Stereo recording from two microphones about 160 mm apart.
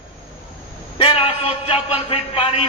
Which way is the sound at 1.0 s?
35° left (ahead or behind).